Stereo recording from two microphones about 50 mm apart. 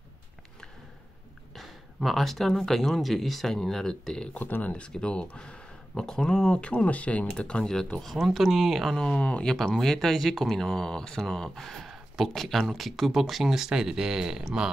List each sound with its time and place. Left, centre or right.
1.5 s speech: centre
4.4 s speech: left
4.8 s speech: left
6.6 s speech: left
8.0 s speech: centre
9.1 s speech: left
9.8 s speech: centre